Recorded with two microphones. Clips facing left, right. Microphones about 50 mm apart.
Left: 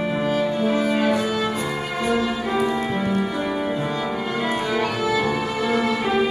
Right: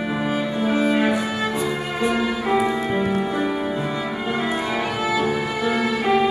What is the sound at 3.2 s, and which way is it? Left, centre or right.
Music, right.